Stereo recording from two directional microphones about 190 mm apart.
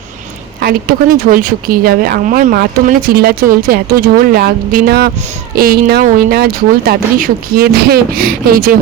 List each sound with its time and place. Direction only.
0.6 s speech: 50° right (ahead or behind)